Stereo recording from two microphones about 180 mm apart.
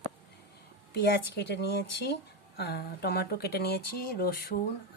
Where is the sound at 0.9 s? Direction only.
65° left (ahead or behind).